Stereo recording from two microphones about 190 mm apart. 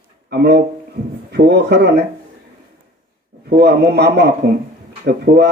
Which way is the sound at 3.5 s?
60° right (ahead or behind).